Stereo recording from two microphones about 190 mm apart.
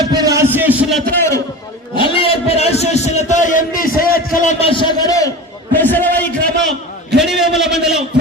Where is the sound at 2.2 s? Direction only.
30° left (ahead or behind).